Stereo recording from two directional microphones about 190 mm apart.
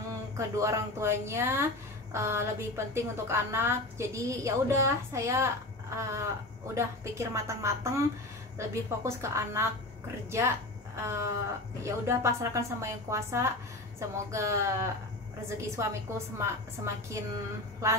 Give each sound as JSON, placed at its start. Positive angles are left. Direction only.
{"t": 0.4, "sound": "a woman's voice", "side_deg": -15}
{"t": 11.0, "sound": "a woman's voice", "side_deg": -15}